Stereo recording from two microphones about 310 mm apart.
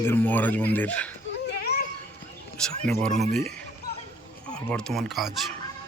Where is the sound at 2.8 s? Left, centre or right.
Centre.